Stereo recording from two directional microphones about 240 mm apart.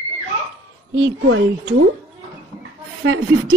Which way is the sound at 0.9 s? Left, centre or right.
Right.